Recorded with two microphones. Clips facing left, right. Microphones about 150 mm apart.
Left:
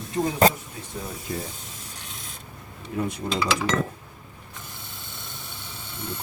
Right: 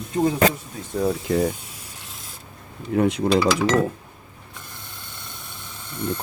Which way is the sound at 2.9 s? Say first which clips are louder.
Right 9 dB; 65° right (ahead or behind).